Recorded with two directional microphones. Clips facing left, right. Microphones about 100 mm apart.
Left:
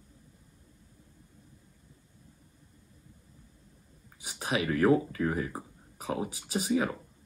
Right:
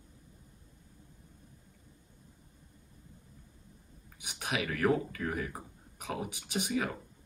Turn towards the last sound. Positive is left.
turn(degrees=35)  # may be behind; listen again after turning